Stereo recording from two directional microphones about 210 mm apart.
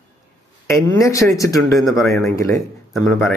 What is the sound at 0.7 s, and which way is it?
Speech, 15° left (ahead or behind).